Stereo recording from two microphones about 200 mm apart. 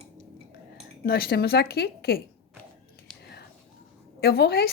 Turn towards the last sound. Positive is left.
turn(degrees=50)  # may be behind; listen again after turning